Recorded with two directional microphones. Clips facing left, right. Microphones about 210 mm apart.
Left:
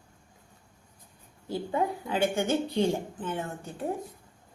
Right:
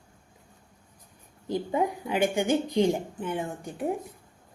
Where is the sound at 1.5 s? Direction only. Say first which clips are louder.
Right 2 dB; 15° right (ahead or behind).